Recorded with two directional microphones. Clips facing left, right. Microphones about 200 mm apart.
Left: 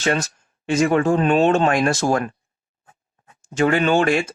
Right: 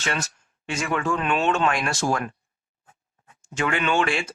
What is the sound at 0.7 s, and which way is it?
Speech, 35° left (ahead or behind).